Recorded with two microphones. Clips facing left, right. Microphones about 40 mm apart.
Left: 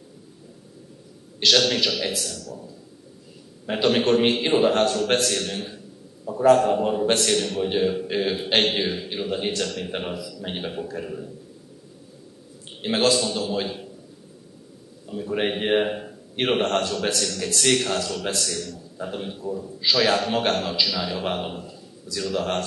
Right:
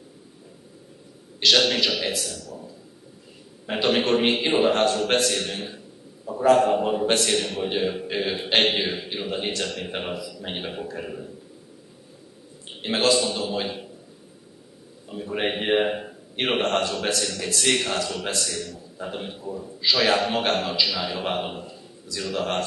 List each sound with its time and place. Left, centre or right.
1.4 s a man's voice: centre
12.8 s a man's voice: centre
15.0 s a man's voice: centre